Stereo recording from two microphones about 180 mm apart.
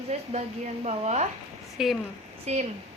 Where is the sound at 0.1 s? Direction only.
40° right (ahead or behind).